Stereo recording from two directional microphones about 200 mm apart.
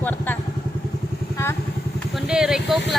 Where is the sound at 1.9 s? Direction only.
Centre (ahead or behind).